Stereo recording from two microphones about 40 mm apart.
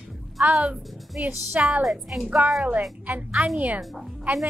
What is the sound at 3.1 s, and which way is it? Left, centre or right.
Speech, right.